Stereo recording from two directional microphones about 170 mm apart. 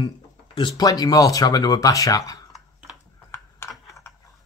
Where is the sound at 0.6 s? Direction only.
25° left (ahead or behind).